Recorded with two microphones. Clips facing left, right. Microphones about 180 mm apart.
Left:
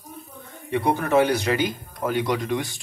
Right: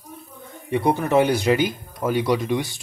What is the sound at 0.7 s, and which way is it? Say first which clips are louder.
A man's voice: right 1 dB; 15° right (ahead or behind).